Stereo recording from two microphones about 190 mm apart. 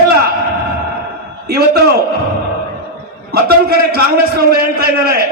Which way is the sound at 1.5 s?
55° right (ahead or behind).